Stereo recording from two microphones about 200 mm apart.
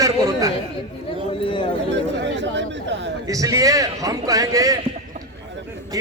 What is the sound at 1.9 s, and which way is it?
Chatter, 65° right (ahead or behind).